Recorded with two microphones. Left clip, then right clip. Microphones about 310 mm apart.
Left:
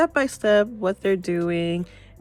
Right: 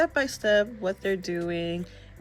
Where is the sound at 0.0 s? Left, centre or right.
Centre.